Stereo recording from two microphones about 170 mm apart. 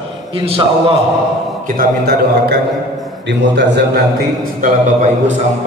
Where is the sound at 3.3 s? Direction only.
90° right.